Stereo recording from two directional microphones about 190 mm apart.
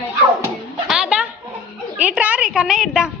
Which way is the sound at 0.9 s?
5° right (ahead or behind).